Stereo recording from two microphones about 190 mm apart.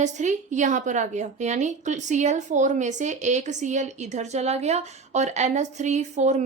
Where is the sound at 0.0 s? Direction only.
40° right (ahead or behind).